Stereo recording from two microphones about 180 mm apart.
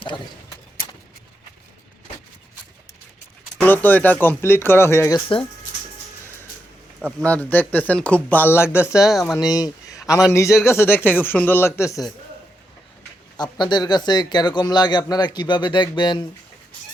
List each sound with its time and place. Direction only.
3.6 s speech: 10° left (ahead or behind)
7.2 s speech: 5° left (ahead or behind)
8.9 s speech: 5° right (ahead or behind)
9.5 s a sound: 20° left (ahead or behind)
10.3 s speech: 15° left (ahead or behind)
13.3 s a man's voice: 25° left (ahead or behind)